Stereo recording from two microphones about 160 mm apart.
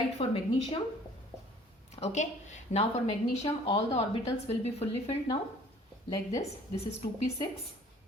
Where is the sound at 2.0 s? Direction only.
45° left (ahead or behind).